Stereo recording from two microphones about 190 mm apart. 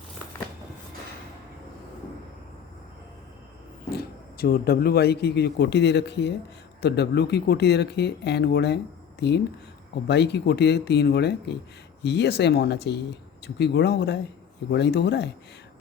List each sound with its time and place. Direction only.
3.9 s speech: 50° left (ahead or behind)
9.9 s speech: 60° left (ahead or behind)